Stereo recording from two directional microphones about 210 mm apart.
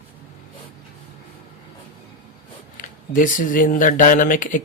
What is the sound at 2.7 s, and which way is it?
Speech, 40° left (ahead or behind).